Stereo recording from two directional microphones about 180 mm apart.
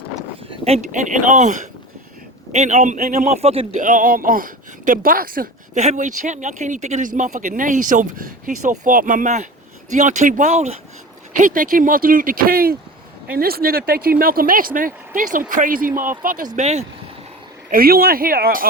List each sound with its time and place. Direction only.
0.5 s a man's voice: 35° right (ahead or behind)
3.8 s speech: 50° right (ahead or behind)
16.6 s a man's voice: 40° right (ahead or behind)
17.7 s speech: 55° right (ahead or behind)